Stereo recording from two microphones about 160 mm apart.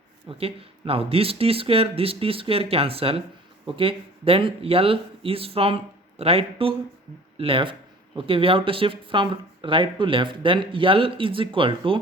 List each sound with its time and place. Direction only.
0.3 s speech: 35° right (ahead or behind)